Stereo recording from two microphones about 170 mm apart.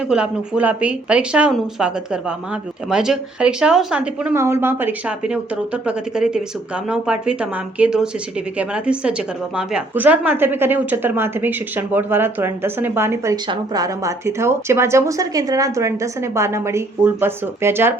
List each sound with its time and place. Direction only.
0.1 s speech: 5° right (ahead or behind)